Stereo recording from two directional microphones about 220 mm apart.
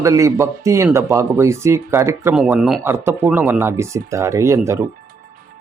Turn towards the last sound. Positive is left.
turn(degrees=-10)  # may be behind; listen again after turning